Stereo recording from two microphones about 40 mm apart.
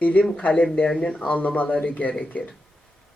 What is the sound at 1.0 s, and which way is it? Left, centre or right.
Speech, left.